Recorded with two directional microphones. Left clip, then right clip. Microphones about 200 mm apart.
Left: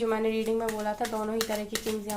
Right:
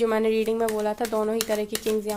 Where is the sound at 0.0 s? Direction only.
55° right (ahead or behind).